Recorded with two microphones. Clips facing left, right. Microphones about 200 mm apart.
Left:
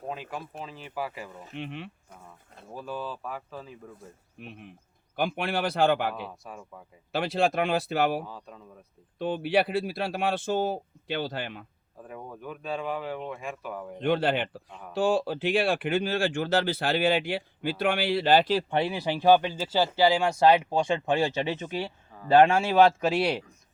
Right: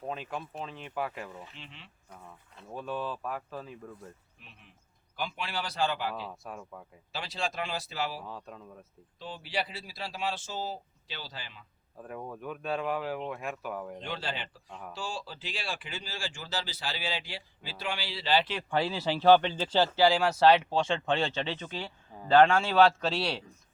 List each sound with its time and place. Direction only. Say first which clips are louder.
0.1 s speech: left 1 dB; 5° left (ahead or behind)
1.5 s speech: left 14 dB; 60° left (ahead or behind)
2.6 s speech: even; centre (ahead or behind)
4.4 s speech: left 14 dB; 55° left (ahead or behind)
6.2 s speech: even; centre (ahead or behind)
7.1 s speech: left 10 dB; 60° left (ahead or behind)
8.3 s speech: even; centre (ahead or behind)
9.1 s speech: left 11 dB; 60° left (ahead or behind)
11.9 s speech: right 1 dB; centre (ahead or behind)
14.0 s speech: left 12 dB; 55° left (ahead or behind)
18.7 s speech: left 2 dB; 20° left (ahead or behind)